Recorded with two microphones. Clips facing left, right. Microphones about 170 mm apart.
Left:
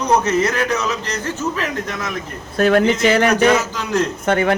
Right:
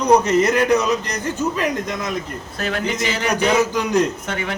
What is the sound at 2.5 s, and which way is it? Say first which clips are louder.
Speech: left 9 dB; 55° left (ahead or behind).